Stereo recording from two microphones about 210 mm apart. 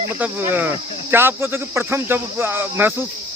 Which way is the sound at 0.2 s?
10° right (ahead or behind).